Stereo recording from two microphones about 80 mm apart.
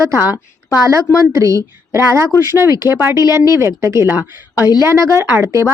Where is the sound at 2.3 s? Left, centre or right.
Left.